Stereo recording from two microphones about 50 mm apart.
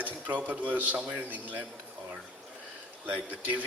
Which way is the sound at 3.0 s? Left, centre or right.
Right.